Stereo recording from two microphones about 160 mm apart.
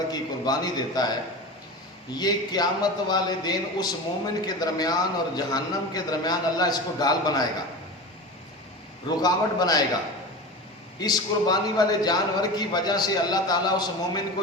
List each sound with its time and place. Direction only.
0.1 s a man's voice: 25° left (ahead or behind)
2.1 s a man's voice: 25° left (ahead or behind)
9.0 s a man's voice: 25° left (ahead or behind)
11.0 s a man's voice: 25° left (ahead or behind)